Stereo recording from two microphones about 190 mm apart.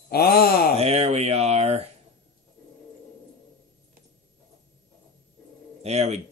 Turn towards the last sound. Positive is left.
turn(degrees=-35)  # may be behind; listen again after turning